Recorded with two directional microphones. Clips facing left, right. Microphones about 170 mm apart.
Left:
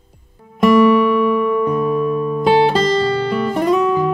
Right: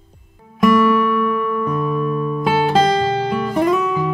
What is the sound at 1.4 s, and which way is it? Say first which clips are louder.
Music: left 4 dB; 15° left (ahead or behind).